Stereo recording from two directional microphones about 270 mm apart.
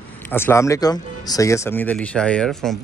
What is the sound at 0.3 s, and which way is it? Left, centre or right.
Speech, centre.